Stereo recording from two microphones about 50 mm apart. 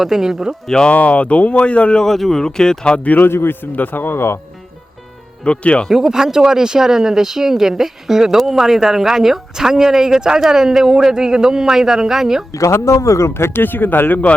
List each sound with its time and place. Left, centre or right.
0.0 s speech: centre
0.7 s speech: centre
0.9 s speech: left
2.0 s speech: centre; by 3.2 s left
3.2 s a man's voice: left
5.4 s speech: left
5.9 s speech: centre
12.5 s speech: left